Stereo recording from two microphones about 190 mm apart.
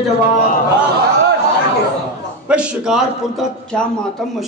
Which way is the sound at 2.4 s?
5° right (ahead or behind).